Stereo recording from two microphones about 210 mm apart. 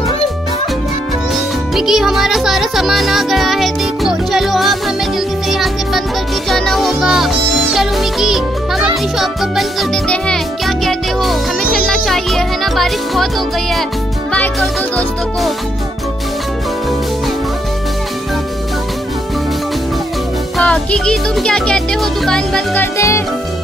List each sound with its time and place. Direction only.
1.3 s music: centre (ahead or behind)
20.5 s music: 5° left (ahead or behind)